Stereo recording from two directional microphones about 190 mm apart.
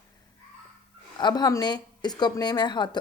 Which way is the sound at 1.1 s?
20° left (ahead or behind).